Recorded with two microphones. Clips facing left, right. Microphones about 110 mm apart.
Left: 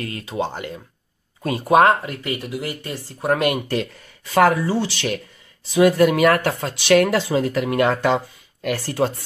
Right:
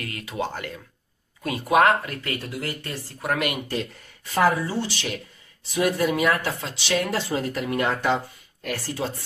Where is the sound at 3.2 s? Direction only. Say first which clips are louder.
Left 6 dB; 30° left (ahead or behind).